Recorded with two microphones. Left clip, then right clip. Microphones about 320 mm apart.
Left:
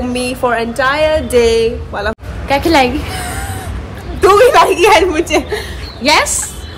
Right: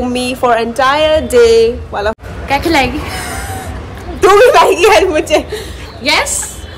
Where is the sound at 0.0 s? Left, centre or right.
Centre.